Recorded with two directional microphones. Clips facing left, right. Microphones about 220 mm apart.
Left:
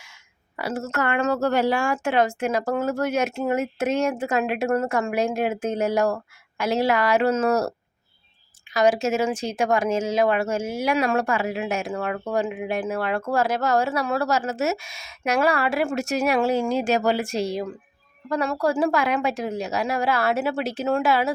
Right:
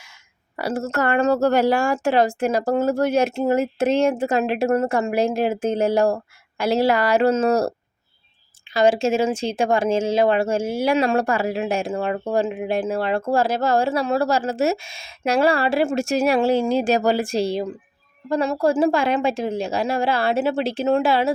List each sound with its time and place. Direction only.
0.5 s a woman's voice: 35° right (ahead or behind)
8.7 s a woman's voice: 30° right (ahead or behind)